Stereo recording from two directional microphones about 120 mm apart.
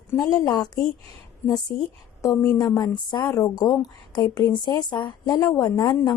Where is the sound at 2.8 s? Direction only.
40° left (ahead or behind).